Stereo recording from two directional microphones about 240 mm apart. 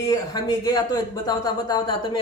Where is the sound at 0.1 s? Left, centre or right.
Centre.